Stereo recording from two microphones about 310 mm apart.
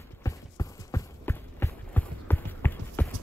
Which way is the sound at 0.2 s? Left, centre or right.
Centre.